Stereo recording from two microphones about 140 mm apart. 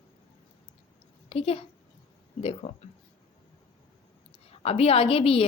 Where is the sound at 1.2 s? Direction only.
45° left (ahead or behind).